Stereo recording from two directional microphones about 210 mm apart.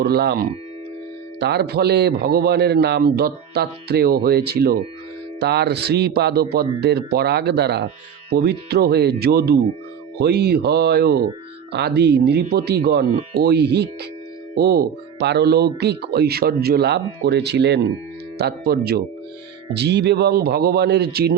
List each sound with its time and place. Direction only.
0.0 s a man's voice: 50° right (ahead or behind)